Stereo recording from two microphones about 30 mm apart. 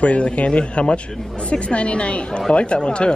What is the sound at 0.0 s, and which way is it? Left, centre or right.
A man's voice, left.